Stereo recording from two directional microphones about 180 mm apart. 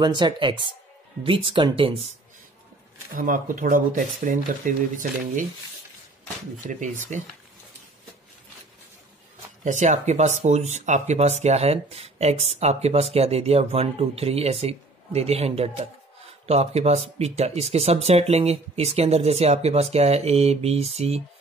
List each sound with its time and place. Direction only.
0.0 s speech: 25° right (ahead or behind)
3.2 s speech: 50° right (ahead or behind)
6.7 s speech: 45° right (ahead or behind)
9.7 s speech: 40° right (ahead or behind)